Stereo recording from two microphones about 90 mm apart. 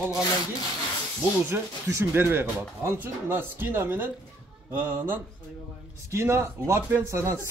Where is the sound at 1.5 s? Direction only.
20° right (ahead or behind).